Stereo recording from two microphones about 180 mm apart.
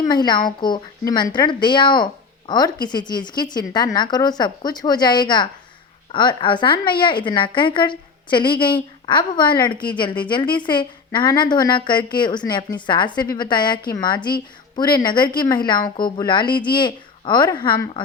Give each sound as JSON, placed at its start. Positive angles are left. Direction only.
{"t": 0.0, "sound": "a woman's voice", "side_deg": 25}